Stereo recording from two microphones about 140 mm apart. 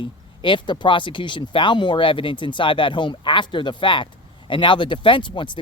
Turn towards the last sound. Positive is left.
turn(degrees=35)  # may be behind; listen again after turning